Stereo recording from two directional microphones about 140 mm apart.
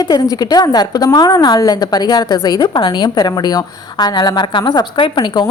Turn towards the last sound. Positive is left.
turn(degrees=35)  # may be behind; listen again after turning